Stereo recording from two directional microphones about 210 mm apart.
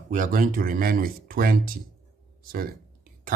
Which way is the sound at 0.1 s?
40° right (ahead or behind).